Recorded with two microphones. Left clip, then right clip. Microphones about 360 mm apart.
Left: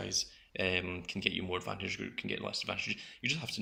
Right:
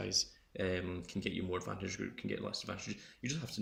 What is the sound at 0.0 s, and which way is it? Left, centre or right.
Speech, centre.